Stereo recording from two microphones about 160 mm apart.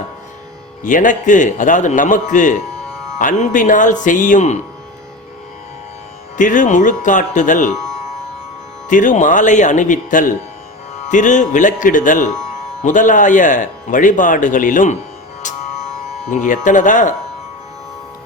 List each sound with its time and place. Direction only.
0.8 s speech: 55° left (ahead or behind)
6.3 s speech: 50° left (ahead or behind)
8.9 s speech: 50° left (ahead or behind)
15.4 s music: 50° left (ahead or behind)
16.3 s speech: 50° left (ahead or behind)